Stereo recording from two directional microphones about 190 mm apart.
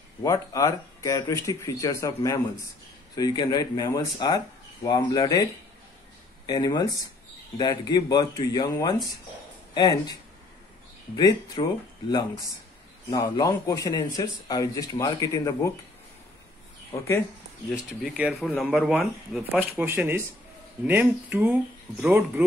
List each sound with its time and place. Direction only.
0.2 s speech: 15° left (ahead or behind)
11.1 s speech: 20° left (ahead or behind)
13.1 s speech: 20° left (ahead or behind)
16.9 s speech: 15° left (ahead or behind)
18.1 s speech: 5° right (ahead or behind)